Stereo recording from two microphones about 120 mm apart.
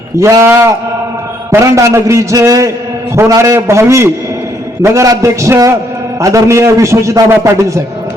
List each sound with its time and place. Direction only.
0.2 s a man's voice: 25° right (ahead or behind)